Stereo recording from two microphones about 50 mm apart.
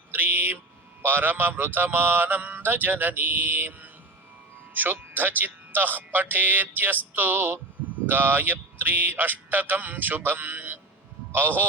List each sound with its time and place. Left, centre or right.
0.1 s mantra: right
1.0 s a man's voice: right